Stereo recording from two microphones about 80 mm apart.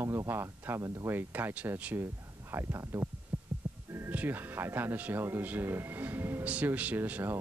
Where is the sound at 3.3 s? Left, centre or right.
Right.